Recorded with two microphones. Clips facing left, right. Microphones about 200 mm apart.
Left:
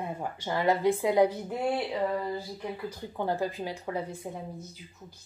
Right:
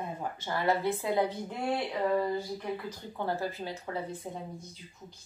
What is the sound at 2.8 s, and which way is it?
Speech, 15° left (ahead or behind).